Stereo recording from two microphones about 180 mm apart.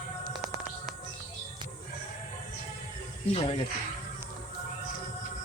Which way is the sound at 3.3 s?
30° left (ahead or behind).